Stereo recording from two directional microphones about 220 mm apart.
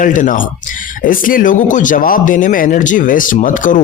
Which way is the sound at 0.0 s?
35° left (ahead or behind).